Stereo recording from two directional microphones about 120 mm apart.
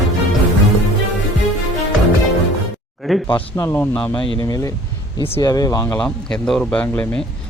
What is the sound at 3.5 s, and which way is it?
Speech, 25° left (ahead or behind).